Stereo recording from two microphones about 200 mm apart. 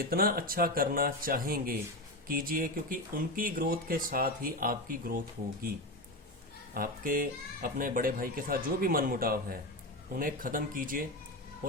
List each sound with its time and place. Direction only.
0.0 s speech: 50° right (ahead or behind)
6.7 s speech: 45° right (ahead or behind)